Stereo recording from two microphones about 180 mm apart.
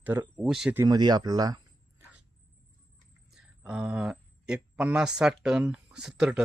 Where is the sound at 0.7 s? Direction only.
20° right (ahead or behind).